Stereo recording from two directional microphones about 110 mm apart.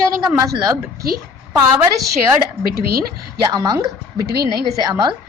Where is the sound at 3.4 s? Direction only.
35° right (ahead or behind).